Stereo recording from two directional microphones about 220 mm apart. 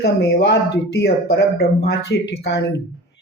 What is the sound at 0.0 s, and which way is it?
Speech, 50° left (ahead or behind).